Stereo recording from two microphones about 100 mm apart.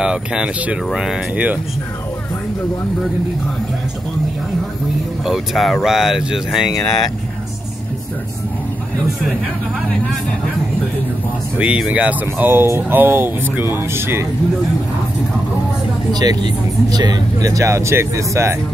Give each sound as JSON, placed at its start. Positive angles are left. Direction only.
{"t": 0.0, "sound": "speech", "side_deg": -10}
{"t": 5.2, "sound": "speech", "side_deg": -5}
{"t": 11.5, "sound": "speech", "side_deg": -10}
{"t": 16.1, "sound": "speech", "side_deg": -40}